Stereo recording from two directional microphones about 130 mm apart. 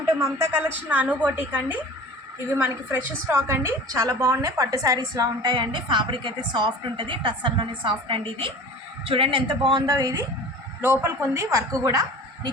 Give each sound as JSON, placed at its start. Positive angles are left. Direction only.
{"t": 0.2, "sound": "a woman's voice", "side_deg": -25}